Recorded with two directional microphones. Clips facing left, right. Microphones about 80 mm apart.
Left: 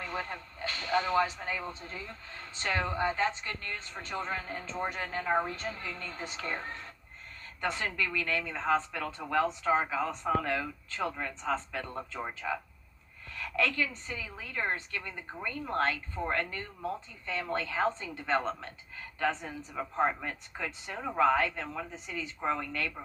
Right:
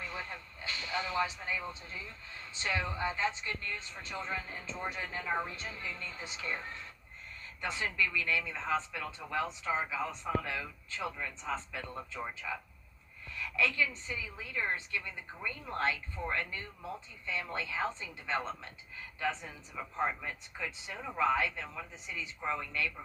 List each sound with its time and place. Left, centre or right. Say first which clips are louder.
0.0 s speech: left 5 dB; left